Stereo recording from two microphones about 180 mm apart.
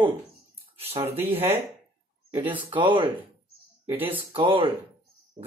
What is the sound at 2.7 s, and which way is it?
Speech, 25° right (ahead or behind).